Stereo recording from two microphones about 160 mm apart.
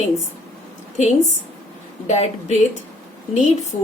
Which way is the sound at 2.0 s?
45° left (ahead or behind).